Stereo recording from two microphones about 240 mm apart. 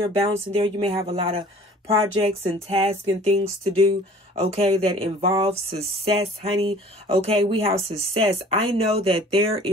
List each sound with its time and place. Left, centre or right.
0.0 s speech: right